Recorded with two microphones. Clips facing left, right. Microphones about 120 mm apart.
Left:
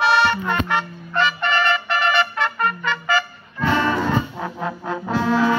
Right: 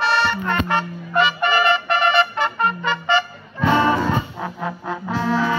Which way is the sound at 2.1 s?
5° right (ahead or behind).